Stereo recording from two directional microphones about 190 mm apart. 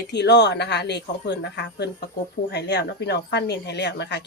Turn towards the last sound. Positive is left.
turn(degrees=60)  # may be behind; listen again after turning